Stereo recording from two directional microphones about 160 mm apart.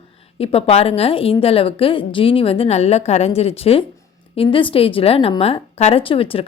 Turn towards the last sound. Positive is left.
turn(degrees=35)  # may be behind; listen again after turning